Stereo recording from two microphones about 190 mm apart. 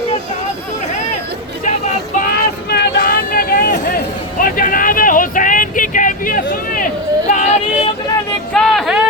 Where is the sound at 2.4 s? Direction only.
55° left (ahead or behind); by 7.9 s 40° left (ahead or behind).